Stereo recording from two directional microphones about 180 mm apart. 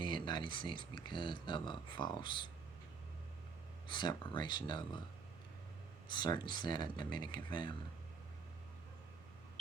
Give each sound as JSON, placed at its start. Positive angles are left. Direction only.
{"t": 0.0, "sound": "speech", "side_deg": 25}
{"t": 3.8, "sound": "speech", "side_deg": 25}
{"t": 6.1, "sound": "speech", "side_deg": 25}